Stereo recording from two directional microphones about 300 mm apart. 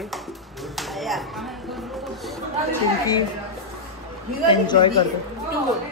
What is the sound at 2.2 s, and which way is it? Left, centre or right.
Chatter, centre.